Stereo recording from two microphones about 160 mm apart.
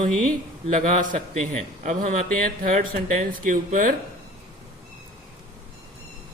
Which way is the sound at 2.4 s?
60° right (ahead or behind).